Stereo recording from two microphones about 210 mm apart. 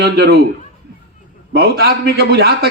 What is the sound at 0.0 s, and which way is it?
Speech, 50° right (ahead or behind).